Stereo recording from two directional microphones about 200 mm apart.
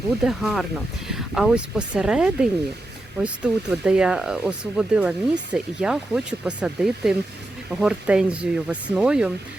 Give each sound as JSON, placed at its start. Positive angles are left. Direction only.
{"t": 0.2, "sound": "speech", "side_deg": 0}